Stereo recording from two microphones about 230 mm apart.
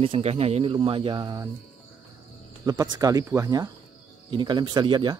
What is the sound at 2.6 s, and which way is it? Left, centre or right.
Speech, centre.